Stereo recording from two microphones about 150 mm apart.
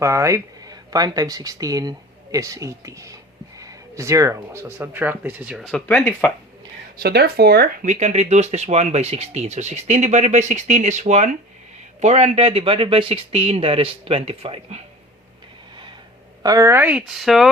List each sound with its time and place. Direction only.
0.0 s speech: 20° right (ahead or behind)
5.5 s speech: centre (ahead or behind)
7.0 s speech: 90° right
7.9 s speech: 50° right (ahead or behind)
16.4 s speech: 25° right (ahead or behind); by 17.5 s centre (ahead or behind)